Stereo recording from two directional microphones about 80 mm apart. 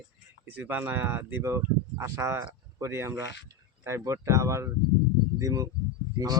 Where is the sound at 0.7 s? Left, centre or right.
Right.